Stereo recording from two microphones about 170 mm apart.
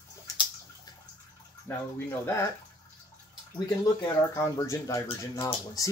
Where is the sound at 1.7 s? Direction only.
15° left (ahead or behind).